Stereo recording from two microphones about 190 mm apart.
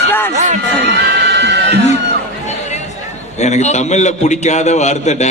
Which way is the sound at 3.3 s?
35° left (ahead or behind).